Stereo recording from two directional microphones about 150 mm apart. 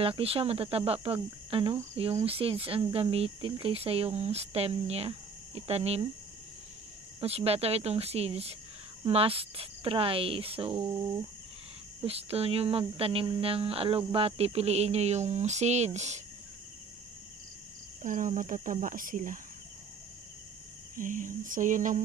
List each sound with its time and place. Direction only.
0.0 s speech: 40° right (ahead or behind)
7.2 s speech: 40° right (ahead or behind)
12.0 s speech: 40° right (ahead or behind)
18.0 s speech: 60° right (ahead or behind)
20.9 s speech: 60° right (ahead or behind)